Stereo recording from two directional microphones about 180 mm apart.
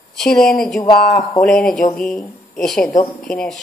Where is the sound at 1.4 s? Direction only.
5° left (ahead or behind).